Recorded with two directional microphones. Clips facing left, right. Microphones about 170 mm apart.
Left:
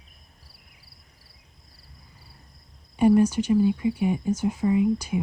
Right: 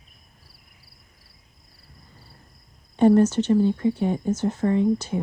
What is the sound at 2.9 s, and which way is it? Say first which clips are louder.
Speech: right 2 dB; 10° left (ahead or behind).